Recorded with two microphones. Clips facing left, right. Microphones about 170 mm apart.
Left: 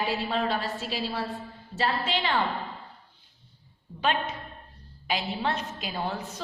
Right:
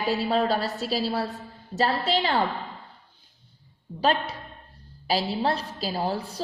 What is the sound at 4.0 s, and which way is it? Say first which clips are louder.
A woman's voice: right 3 dB; 35° right (ahead or behind).